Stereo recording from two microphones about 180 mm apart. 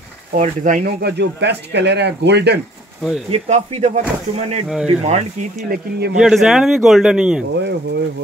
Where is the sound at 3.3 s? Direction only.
35° right (ahead or behind).